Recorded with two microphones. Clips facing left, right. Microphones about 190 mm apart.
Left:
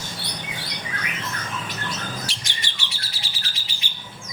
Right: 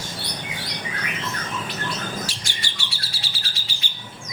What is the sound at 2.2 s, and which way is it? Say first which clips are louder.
Bird: right 1 dB; 20° left (ahead or behind).